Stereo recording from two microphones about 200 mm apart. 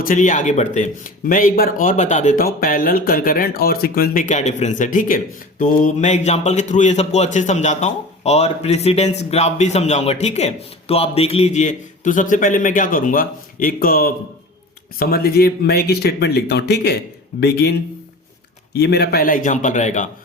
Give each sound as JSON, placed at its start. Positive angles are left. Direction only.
{"t": 0.0, "sound": "speech", "side_deg": 40}
{"t": 18.8, "sound": "speech", "side_deg": 55}